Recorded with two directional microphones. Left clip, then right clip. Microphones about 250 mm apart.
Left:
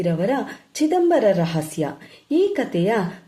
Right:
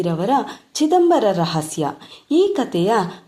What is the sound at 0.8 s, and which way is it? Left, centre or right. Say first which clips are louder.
Speech: right 4 dB; right.